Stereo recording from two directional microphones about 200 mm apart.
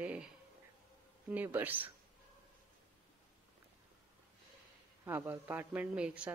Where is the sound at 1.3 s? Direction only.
10° right (ahead or behind).